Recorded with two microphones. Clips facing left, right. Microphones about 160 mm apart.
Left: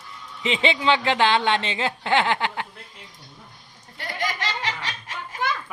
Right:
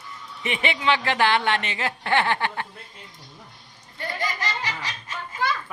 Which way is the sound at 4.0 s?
90° left.